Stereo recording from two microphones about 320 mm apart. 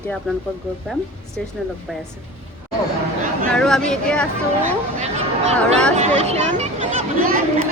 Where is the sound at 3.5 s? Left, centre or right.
Centre.